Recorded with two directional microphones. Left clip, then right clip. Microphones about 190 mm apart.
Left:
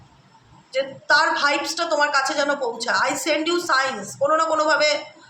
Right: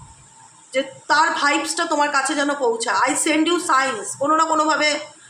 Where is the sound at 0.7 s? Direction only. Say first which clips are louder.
Even; 45° right (ahead or behind).